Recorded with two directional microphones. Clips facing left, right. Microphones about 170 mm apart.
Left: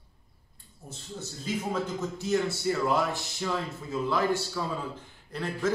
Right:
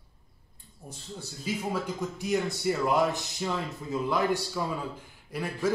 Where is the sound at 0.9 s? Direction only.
10° right (ahead or behind).